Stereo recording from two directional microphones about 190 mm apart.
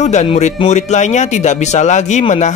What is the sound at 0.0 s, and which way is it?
Speech, 35° left (ahead or behind).